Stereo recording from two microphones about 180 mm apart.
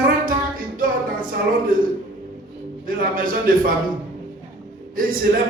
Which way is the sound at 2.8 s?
50° right (ahead or behind).